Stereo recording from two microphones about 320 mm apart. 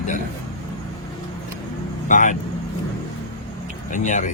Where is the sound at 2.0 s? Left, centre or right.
Left.